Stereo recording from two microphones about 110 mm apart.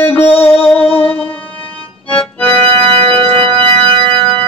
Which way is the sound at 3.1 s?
55° right (ahead or behind).